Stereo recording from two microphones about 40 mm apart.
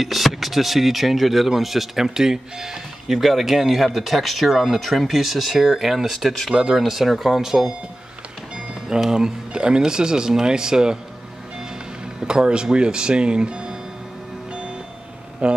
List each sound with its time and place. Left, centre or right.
0.0 s speech: centre
8.5 s music: centre
9.1 s speech: centre
12.2 s speech: right
15.4 s speech: right